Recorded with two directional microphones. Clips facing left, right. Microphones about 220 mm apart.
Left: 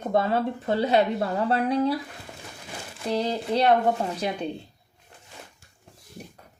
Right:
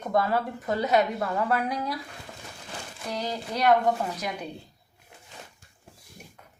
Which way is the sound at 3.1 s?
30° left (ahead or behind).